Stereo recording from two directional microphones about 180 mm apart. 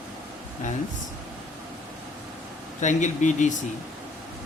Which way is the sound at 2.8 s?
40° left (ahead or behind).